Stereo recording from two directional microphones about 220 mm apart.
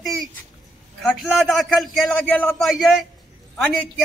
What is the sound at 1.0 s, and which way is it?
A man's voice, centre (ahead or behind).